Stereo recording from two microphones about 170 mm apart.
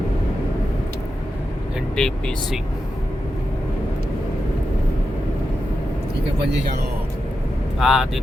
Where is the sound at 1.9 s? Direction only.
5° left (ahead or behind).